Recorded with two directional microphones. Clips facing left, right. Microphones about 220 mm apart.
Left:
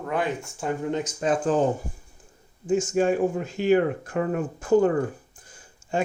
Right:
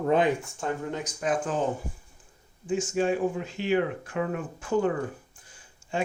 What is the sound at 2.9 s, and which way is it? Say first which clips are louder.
Speech: left 2 dB; 45° left (ahead or behind).